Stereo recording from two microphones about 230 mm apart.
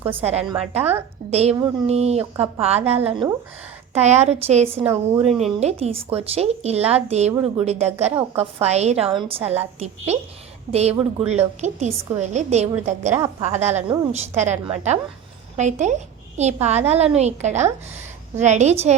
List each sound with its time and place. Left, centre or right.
0.1 s a woman's voice: right
4.8 s speech: centre
5.2 s a woman's voice: right